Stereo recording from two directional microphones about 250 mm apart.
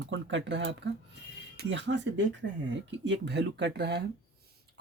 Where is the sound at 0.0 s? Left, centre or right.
Right.